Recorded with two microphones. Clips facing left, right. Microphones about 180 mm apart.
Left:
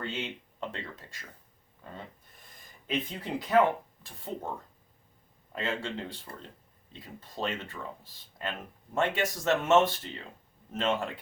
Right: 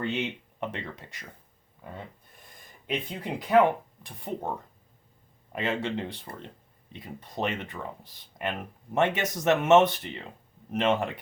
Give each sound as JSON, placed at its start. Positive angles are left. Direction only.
{"t": 0.0, "sound": "speech", "side_deg": -20}
{"t": 2.8, "sound": "speech", "side_deg": -15}
{"t": 6.3, "sound": "speech", "side_deg": -35}
{"t": 6.9, "sound": "speech", "side_deg": -20}